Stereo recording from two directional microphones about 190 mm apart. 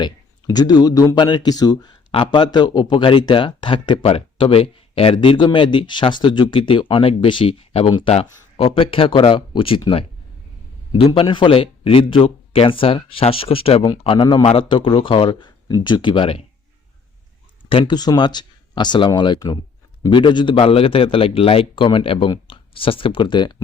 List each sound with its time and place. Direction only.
0.0 s speech: 20° left (ahead or behind)
17.7 s speech: 25° left (ahead or behind)